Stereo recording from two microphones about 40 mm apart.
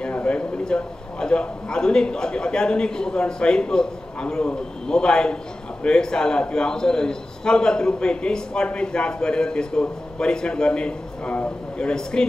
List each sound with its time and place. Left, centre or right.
0.1 s a man's voice: left